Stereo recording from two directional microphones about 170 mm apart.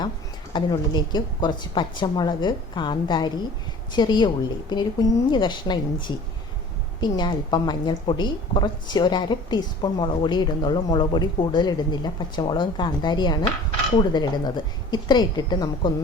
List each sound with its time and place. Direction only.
0.5 s a woman's voice: 25° left (ahead or behind)